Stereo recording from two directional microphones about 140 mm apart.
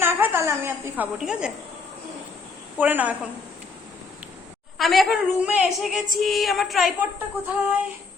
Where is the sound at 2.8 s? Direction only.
10° right (ahead or behind).